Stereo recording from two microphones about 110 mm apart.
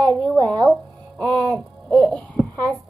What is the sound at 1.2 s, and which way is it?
Music, 15° left (ahead or behind).